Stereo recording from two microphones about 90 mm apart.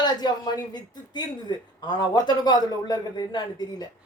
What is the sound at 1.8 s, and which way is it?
A man's voice, 50° left (ahead or behind).